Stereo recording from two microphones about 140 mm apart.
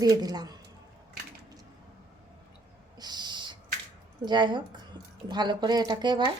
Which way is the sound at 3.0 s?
30° right (ahead or behind).